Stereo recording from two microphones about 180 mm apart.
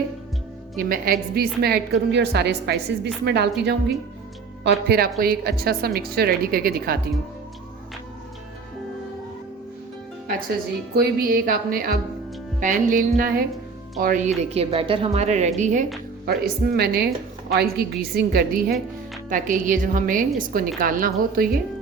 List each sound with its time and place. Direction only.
0.8 s a woman's voice: 55° right (ahead or behind); by 3.9 s 70° right (ahead or behind)
4.6 s a woman's voice: 60° right (ahead or behind)
10.9 s a woman's voice: 55° right (ahead or behind)
16.2 s a woman's voice: 60° right (ahead or behind)
19.3 s a woman's voice: 45° right (ahead or behind)